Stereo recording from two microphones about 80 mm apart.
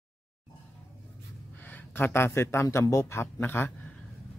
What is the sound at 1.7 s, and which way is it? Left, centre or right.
Speech, left.